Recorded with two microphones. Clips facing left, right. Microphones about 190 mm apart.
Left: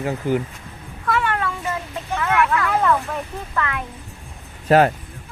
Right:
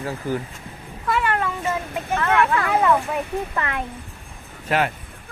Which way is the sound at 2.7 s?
5° right (ahead or behind).